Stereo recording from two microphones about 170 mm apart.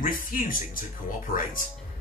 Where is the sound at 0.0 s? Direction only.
55° left (ahead or behind).